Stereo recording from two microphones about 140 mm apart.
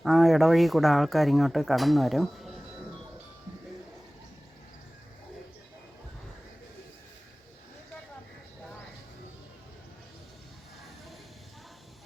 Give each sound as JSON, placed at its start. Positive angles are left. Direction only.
{"t": 0.0, "sound": "speech", "side_deg": 0}